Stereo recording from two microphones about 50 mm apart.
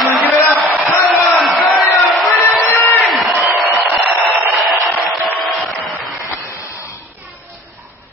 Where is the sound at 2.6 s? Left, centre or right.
Left.